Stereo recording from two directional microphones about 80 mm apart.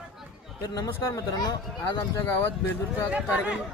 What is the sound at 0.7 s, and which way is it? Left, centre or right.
Speech, left.